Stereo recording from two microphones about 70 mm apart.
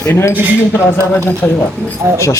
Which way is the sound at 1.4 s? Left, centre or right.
Centre.